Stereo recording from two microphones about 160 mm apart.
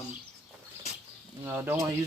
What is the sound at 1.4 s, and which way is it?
Speech, 15° right (ahead or behind).